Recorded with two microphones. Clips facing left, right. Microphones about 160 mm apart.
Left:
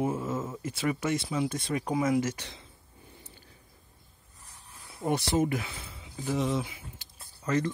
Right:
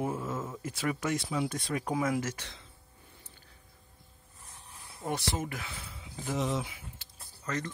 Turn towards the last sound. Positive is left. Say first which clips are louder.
# left 7 dB
turn(degrees=10)  # may be behind; listen again after turning